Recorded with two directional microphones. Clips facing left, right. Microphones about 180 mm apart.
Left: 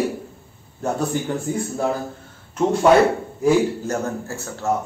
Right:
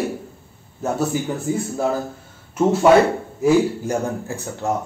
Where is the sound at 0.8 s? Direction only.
Centre (ahead or behind).